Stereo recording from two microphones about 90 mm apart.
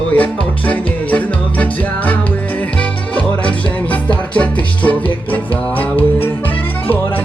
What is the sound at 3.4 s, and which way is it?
Music, 15° left (ahead or behind).